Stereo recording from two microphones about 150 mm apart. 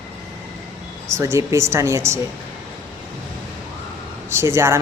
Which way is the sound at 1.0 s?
20° right (ahead or behind).